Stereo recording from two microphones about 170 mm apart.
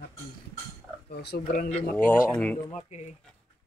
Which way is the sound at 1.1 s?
75° left (ahead or behind).